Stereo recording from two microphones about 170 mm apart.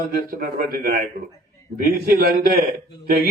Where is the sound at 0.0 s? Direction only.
60° right (ahead or behind).